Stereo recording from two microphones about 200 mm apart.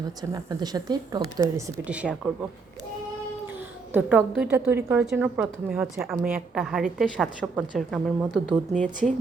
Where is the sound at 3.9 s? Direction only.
10° right (ahead or behind).